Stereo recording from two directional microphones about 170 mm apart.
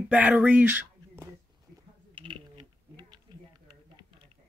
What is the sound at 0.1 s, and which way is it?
Speech, 10° right (ahead or behind).